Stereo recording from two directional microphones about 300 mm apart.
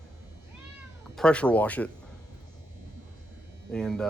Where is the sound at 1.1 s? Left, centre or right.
Centre.